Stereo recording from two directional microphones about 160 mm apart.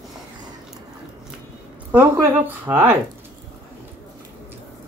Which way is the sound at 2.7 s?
10° right (ahead or behind).